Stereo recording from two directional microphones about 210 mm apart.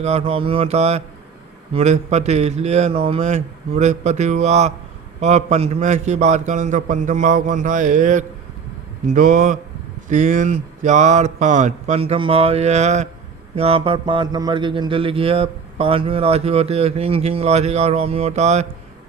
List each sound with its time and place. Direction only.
0.0 s mantra: 30° right (ahead or behind)
1.7 s a man's voice: 30° right (ahead or behind)
13.6 s mantra: 25° right (ahead or behind)